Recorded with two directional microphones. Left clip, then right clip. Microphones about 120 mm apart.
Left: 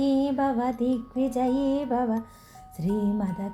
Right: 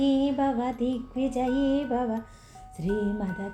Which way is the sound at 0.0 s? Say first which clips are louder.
Even; 45° left (ahead or behind).